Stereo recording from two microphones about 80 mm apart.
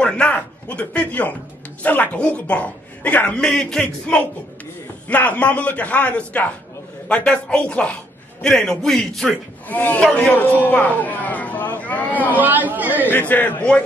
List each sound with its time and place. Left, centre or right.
0.0 s a man's voice: centre
9.7 s speech: left
9.9 s a man's voice: centre
10.3 s speech: left
12.4 s speech: right
13.1 s speech: left